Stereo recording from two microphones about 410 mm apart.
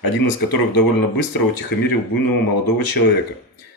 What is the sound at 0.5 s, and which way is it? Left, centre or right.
Speech, left.